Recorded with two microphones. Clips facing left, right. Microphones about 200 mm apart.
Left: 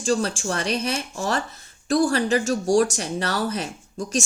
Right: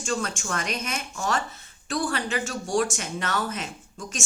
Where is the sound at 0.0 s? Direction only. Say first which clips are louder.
Left 6 dB; 35° left (ahead or behind).